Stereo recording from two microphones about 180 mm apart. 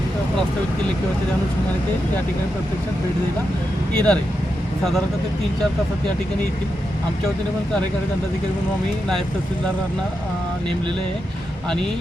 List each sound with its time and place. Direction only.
3.9 s speech: 5° left (ahead or behind)